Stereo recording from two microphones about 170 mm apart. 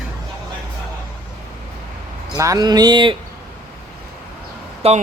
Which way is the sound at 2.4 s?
20° right (ahead or behind).